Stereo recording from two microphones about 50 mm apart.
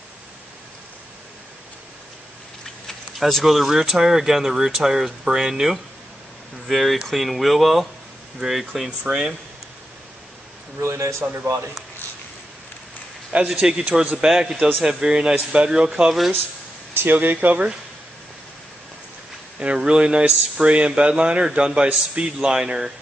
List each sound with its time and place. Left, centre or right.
2.9 s speech: centre
9.0 s speech: centre
10.8 s a man's voice: right
13.5 s speech: centre
16.9 s speech: right
19.6 s speech: right